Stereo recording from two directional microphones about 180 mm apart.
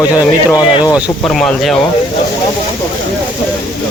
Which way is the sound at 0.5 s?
20° left (ahead or behind).